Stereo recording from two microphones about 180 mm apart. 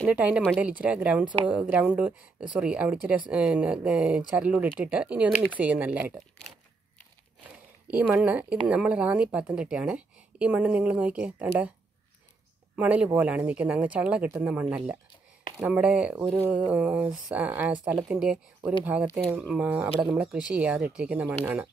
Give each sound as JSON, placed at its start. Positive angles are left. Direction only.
{"t": 0.0, "sound": "speech", "side_deg": -10}
{"t": 1.2, "sound": "a woman's voice", "side_deg": -30}
{"t": 1.5, "sound": "speech", "side_deg": -5}
{"t": 7.9, "sound": "speech", "side_deg": -5}
{"t": 12.7, "sound": "speech", "side_deg": -5}